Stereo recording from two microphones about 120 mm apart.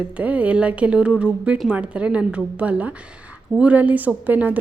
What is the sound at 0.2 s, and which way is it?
A woman's voice, 10° right (ahead or behind).